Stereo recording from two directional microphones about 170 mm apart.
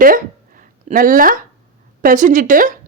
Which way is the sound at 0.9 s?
55° right (ahead or behind).